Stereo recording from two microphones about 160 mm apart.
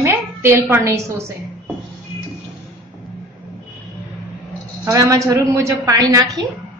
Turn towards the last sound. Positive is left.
turn(degrees=-25)  # may be behind; listen again after turning